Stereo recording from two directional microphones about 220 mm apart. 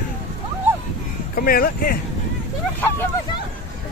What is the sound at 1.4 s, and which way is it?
Speech, 40° left (ahead or behind).